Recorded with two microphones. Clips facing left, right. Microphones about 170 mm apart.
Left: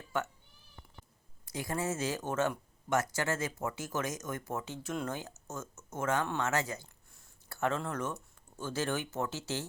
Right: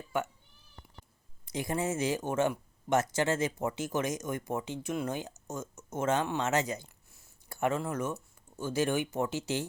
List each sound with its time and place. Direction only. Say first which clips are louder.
0.1 s speech: right 2 dB; 10° right (ahead or behind)
1.5 s speech: right 3 dB; 20° right (ahead or behind)